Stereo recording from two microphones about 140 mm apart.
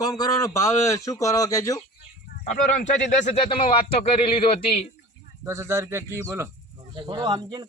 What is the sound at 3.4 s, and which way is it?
Speech, 40° left (ahead or behind).